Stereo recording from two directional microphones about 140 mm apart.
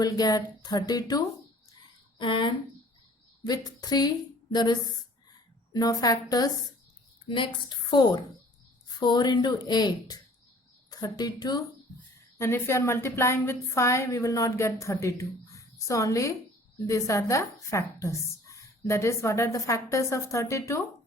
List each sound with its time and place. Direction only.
0.0 s a woman's voice: 25° left (ahead or behind)
12.4 s a woman's voice: 20° left (ahead or behind)